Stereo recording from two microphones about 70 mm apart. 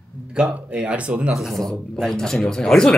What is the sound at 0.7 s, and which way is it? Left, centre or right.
Speech, centre.